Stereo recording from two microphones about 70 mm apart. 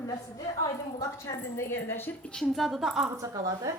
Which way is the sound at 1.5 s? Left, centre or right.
Left.